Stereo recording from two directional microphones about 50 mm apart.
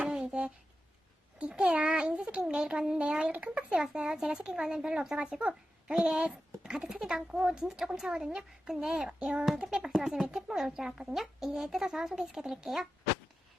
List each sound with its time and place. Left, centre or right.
0.2 s a sound: right
1.4 s a child's voice: centre
5.9 s a child's voice: centre
6.1 s a child's voice: centre
9.1 s child singing: right
9.6 s a child's voice: centre